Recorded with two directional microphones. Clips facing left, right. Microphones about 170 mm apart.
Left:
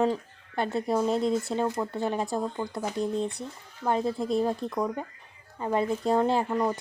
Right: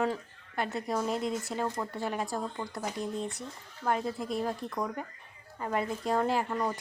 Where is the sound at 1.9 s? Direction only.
25° left (ahead or behind).